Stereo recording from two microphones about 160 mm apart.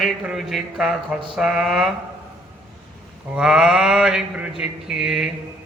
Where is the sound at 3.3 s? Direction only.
5° right (ahead or behind).